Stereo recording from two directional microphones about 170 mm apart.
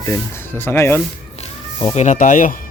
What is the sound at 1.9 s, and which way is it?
Speech, 45° left (ahead or behind).